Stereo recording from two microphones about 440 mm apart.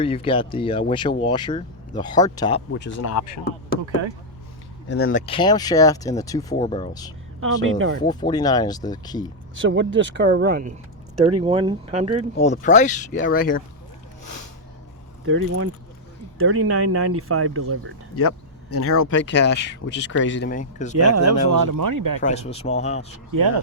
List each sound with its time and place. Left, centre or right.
0.0 s speech: centre
2.7 s speech: left
3.0 s speech: left
4.9 s speech: left
5.1 s speech: centre
7.4 s speech: right
7.9 s speech: centre
9.6 s speech: right
12.4 s speech: centre
15.3 s speech: right
18.2 s speech: left
21.2 s speech: right
22.2 s speech: centre